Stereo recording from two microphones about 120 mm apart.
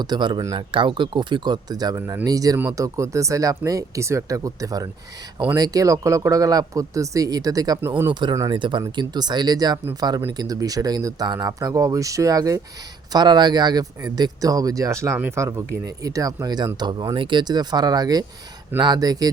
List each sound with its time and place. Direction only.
0.0 s speech: 35° right (ahead or behind)
7.8 s speech: 20° right (ahead or behind)
8.1 s speech: 35° right (ahead or behind)